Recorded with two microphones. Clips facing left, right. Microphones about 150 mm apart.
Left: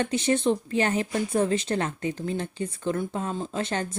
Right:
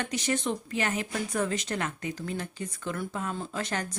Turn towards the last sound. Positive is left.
turn(degrees=25)  # may be behind; listen again after turning